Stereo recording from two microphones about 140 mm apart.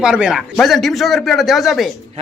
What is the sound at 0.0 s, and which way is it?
A man's voice, 5° right (ahead or behind).